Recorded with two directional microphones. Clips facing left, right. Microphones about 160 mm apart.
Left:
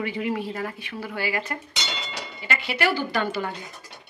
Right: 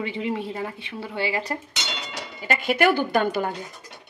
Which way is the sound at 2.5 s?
45° right (ahead or behind).